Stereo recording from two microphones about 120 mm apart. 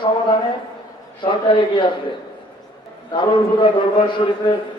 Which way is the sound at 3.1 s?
40° left (ahead or behind).